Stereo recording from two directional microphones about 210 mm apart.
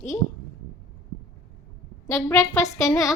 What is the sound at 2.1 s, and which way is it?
A woman's voice, 15° left (ahead or behind).